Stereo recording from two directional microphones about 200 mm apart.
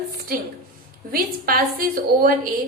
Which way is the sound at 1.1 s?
45° right (ahead or behind).